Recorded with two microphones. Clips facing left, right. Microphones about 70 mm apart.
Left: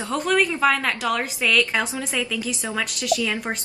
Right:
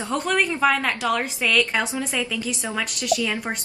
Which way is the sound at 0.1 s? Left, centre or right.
Centre.